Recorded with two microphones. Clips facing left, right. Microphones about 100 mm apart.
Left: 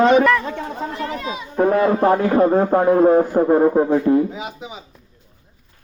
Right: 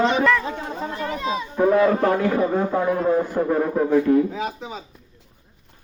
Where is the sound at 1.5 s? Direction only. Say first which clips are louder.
Left 1 dB; 50° left (ahead or behind).